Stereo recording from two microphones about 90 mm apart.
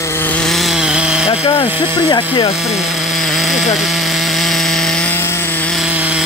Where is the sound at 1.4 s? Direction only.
90° left.